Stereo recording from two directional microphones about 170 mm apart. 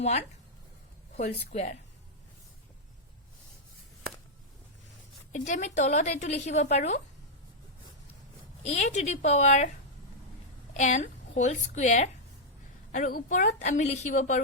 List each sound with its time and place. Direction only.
1.1 s speech: 40° left (ahead or behind)
5.3 s a woman's voice: 45° left (ahead or behind)
8.6 s speech: 40° left (ahead or behind)
10.8 s a woman's voice: 45° left (ahead or behind)